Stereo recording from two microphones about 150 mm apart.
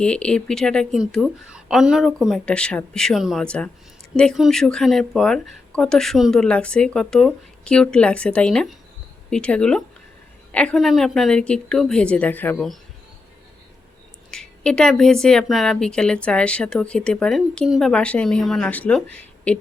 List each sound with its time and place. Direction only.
0.0 s speech: 5° left (ahead or behind)
14.3 s speech: 5° left (ahead or behind)